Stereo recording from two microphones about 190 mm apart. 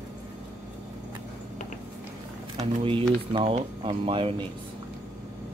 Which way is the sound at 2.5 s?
30° right (ahead or behind).